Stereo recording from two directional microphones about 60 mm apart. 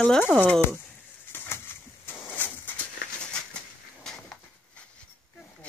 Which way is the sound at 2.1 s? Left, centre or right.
Left.